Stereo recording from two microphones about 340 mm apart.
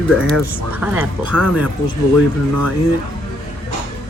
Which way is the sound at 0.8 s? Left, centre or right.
Centre.